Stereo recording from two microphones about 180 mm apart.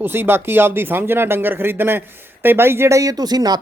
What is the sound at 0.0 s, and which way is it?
Speech, 10° right (ahead or behind).